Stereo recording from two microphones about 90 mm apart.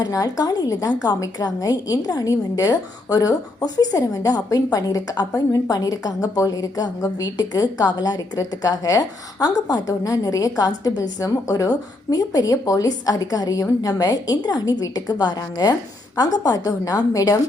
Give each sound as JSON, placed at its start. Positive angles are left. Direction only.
{"t": 0.0, "sound": "a woman's voice", "side_deg": 45}